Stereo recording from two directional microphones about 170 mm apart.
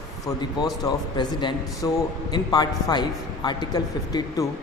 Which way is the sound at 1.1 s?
25° left (ahead or behind).